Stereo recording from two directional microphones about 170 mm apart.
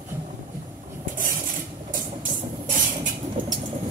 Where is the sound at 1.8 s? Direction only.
50° right (ahead or behind).